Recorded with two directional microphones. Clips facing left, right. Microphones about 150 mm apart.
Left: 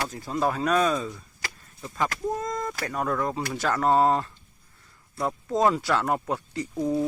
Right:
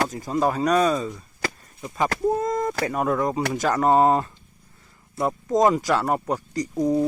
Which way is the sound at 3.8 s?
5° right (ahead or behind).